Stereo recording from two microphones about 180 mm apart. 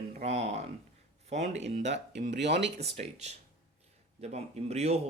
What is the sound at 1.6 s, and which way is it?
Speech, 75° right (ahead or behind).